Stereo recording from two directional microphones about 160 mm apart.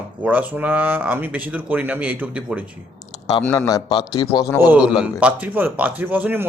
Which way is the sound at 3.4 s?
10° left (ahead or behind).